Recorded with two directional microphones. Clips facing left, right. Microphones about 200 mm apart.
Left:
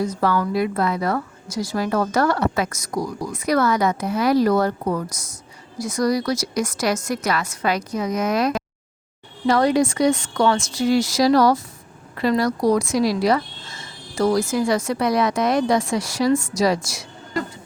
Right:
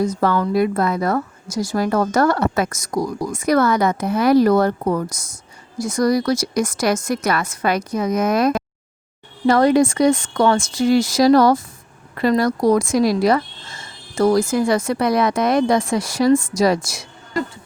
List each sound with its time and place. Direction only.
0.1 s a woman's voice: 50° right (ahead or behind)